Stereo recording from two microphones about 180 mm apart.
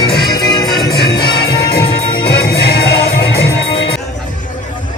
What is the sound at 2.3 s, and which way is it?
Music, 65° left (ahead or behind).